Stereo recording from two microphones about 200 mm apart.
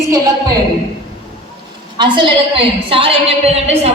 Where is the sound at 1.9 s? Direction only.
25° right (ahead or behind).